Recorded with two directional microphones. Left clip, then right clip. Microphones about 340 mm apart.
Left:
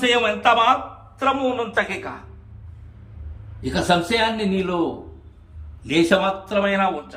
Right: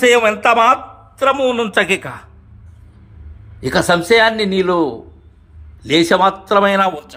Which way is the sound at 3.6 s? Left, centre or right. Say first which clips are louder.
Right 5 dB; centre.